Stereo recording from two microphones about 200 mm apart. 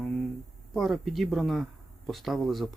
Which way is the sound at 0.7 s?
Centre (ahead or behind).